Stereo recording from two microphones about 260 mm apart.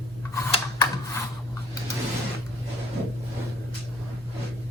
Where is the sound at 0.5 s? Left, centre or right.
Centre.